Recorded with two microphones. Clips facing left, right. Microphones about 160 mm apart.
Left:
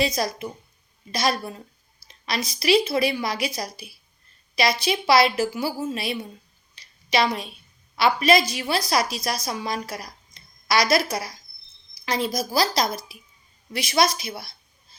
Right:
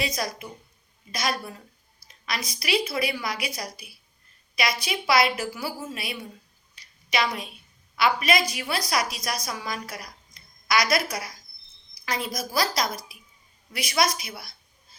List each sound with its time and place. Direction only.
0.0 s a woman's voice: 25° left (ahead or behind)
6.7 s a sound: 30° left (ahead or behind)
7.9 s a woman's voice: 30° left (ahead or behind)